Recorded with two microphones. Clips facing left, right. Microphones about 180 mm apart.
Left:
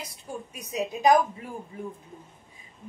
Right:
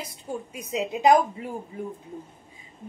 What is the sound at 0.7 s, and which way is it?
Speech, 20° right (ahead or behind).